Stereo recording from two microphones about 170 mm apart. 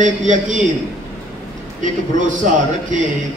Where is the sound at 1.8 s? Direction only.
50° right (ahead or behind).